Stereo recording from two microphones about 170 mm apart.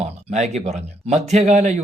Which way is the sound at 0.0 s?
40° right (ahead or behind).